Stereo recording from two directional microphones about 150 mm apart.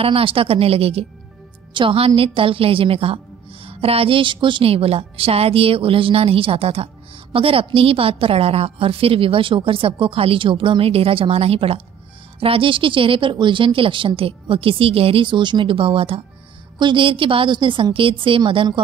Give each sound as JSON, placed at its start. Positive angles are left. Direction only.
{"t": 0.0, "sound": "a woman's voice", "side_deg": -40}